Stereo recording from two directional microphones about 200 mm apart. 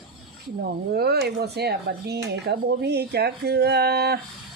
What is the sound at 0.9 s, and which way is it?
Speech, 55° right (ahead or behind).